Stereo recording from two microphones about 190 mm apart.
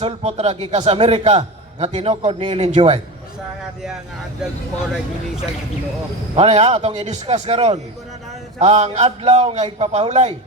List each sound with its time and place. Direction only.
0.0 s a man's voice: 35° right (ahead or behind)
6.3 s a man's voice: 35° right (ahead or behind)